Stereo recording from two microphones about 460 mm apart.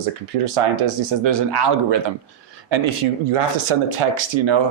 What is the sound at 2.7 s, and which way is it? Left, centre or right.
Speech, right.